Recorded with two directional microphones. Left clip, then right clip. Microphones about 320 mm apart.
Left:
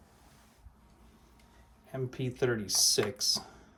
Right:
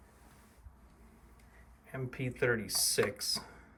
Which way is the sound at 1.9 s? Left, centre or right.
Centre.